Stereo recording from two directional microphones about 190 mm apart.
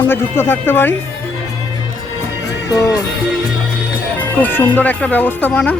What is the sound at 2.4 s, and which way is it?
Music, 15° left (ahead or behind).